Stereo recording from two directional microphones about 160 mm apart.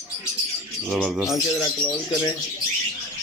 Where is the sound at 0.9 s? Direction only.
Centre (ahead or behind).